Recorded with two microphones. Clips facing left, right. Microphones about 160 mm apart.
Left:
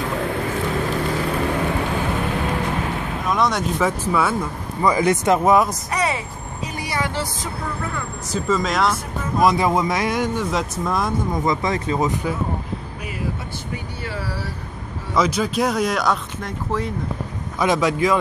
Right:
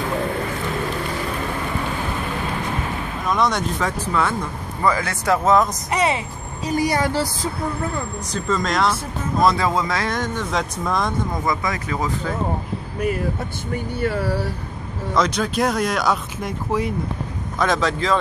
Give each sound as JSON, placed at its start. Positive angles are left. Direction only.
{"t": 3.3, "sound": "speech", "side_deg": 0}
{"t": 4.8, "sound": "speech", "side_deg": 15}
{"t": 5.9, "sound": "vehicle", "side_deg": -25}
{"t": 6.7, "sound": "a woman's voice", "side_deg": -40}
{"t": 8.3, "sound": "speech", "side_deg": 5}
{"t": 9.4, "sound": "speech", "side_deg": 15}
{"t": 11.4, "sound": "speech", "side_deg": 25}
{"t": 14.0, "sound": "speech", "side_deg": -55}
{"t": 15.1, "sound": "speech", "side_deg": 5}
{"t": 17.6, "sound": "speech", "side_deg": 10}